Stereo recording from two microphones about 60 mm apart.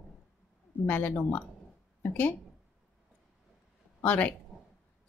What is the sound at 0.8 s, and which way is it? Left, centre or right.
Speech, left.